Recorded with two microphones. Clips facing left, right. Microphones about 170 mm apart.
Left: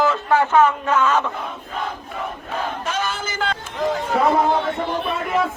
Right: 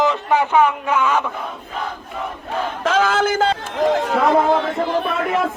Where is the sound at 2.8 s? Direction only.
90° right.